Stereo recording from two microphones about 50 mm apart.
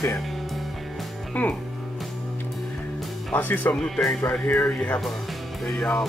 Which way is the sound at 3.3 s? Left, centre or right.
Left.